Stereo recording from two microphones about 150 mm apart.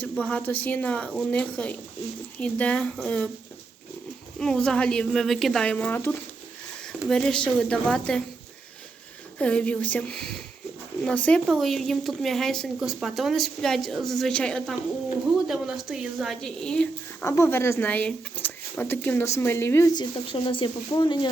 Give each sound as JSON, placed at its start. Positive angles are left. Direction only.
{"t": 0.0, "sound": "a woman's voice", "side_deg": 10}
{"t": 4.4, "sound": "speech", "side_deg": 5}
{"t": 9.4, "sound": "a woman's voice", "side_deg": 10}
{"t": 19.9, "sound": "speech", "side_deg": 30}